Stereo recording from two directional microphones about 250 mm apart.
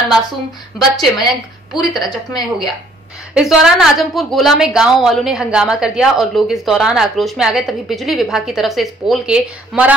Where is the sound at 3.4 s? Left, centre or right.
Centre.